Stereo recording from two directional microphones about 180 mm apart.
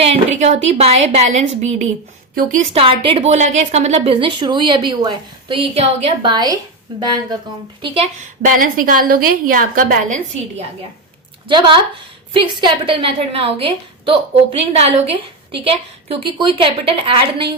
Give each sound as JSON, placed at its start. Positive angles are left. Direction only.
{"t": 0.0, "sound": "a woman's voice", "side_deg": -35}
{"t": 2.8, "sound": "a woman's voice", "side_deg": -30}
{"t": 7.8, "sound": "a woman's voice", "side_deg": -35}
{"t": 11.4, "sound": "a woman's voice", "side_deg": -25}